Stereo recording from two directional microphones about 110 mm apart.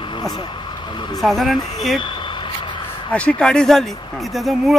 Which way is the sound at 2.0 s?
45° left (ahead or behind).